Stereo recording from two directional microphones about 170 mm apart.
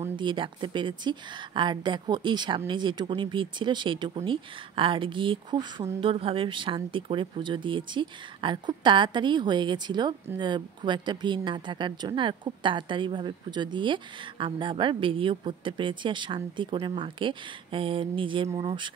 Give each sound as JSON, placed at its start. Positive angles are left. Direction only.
{"t": 0.0, "sound": "a woman's voice", "side_deg": -30}